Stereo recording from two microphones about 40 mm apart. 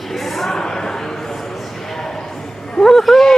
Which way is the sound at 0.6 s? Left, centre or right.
Centre.